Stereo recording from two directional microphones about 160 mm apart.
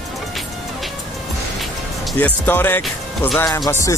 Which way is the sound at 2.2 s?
10° left (ahead or behind).